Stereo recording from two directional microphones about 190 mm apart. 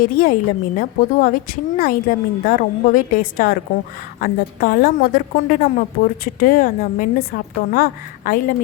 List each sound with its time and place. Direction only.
0.0 s a woman's voice: 45° left (ahead or behind)